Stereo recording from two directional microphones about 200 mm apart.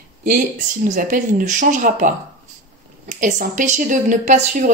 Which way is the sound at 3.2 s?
40° right (ahead or behind).